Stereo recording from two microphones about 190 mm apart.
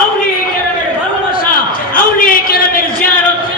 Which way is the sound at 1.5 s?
50° left (ahead or behind).